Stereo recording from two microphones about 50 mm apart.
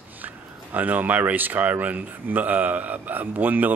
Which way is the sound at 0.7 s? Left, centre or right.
Right.